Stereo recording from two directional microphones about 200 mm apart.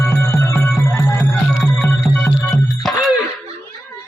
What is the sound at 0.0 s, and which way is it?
Music, 15° left (ahead or behind).